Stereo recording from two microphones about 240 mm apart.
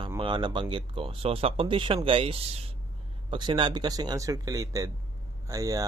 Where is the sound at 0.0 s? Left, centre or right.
Centre.